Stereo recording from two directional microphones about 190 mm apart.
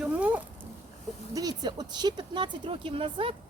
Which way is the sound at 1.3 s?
20° right (ahead or behind).